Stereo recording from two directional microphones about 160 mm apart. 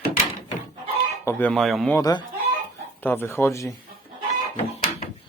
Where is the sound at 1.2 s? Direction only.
10° left (ahead or behind).